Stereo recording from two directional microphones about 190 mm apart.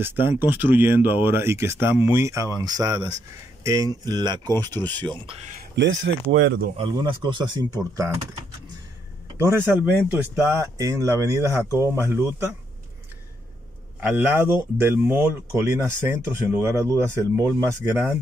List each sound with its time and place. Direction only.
0.0 s speech: 10° right (ahead or behind)
4.7 s speech: 10° left (ahead or behind)
5.6 s speech: 70° right (ahead or behind)
6.8 s speech: 25° right (ahead or behind)
9.4 s speech: 10° right (ahead or behind)
13.9 s speech: 10° right (ahead or behind)